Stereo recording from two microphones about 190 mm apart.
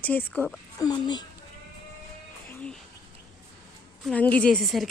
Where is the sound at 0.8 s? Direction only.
20° left (ahead or behind).